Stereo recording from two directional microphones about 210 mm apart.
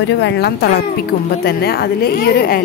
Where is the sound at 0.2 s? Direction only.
55° left (ahead or behind).